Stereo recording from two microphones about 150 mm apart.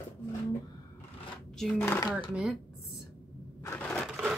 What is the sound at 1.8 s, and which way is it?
Speech, 15° left (ahead or behind).